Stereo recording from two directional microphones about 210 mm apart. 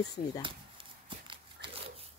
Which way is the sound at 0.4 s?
25° right (ahead or behind).